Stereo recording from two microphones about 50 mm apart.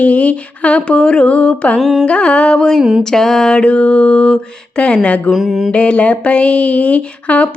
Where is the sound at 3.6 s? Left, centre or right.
Left.